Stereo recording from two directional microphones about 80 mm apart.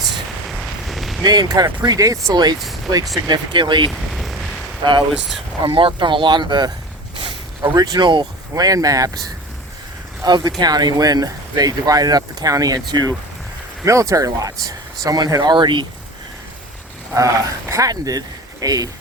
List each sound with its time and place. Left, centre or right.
0.4 s a sound: centre
1.2 s speech: right
2.3 s speech: right
2.6 s speech: centre
3.2 s speech: right
3.9 s a sound: centre
4.8 s speech: right
8.5 s speech: right
10.2 s speech: right
13.8 s speech: right
17.2 s speech: right